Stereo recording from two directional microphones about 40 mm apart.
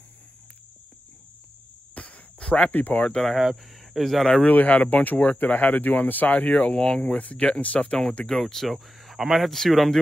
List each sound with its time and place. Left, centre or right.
2.0 s cricket: left
2.7 s speech: left
3.2 s speech: centre
4.5 s speech: left
8.3 s speech: centre